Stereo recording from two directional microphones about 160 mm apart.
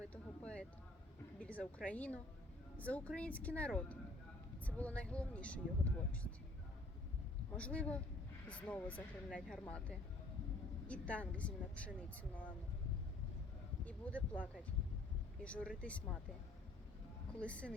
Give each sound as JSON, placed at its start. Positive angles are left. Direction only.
{"t": 0.1, "sound": "a sound", "side_deg": 5}
{"t": 1.4, "sound": "a woman's voice", "side_deg": 10}
{"t": 7.5, "sound": "speech", "side_deg": 10}
{"t": 13.8, "sound": "speech", "side_deg": 10}
{"t": 17.4, "sound": "speech", "side_deg": 10}